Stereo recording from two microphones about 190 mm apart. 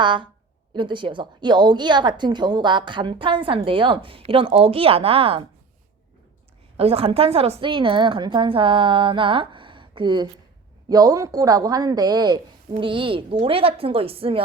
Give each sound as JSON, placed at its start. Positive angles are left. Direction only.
{"t": 0.0, "sound": "a woman's voice", "side_deg": -25}
{"t": 6.7, "sound": "a woman's voice", "side_deg": -30}